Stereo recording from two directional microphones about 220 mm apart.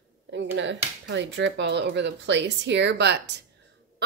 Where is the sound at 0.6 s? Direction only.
55° right (ahead or behind).